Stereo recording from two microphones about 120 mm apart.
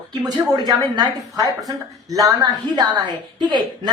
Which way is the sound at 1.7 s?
30° right (ahead or behind).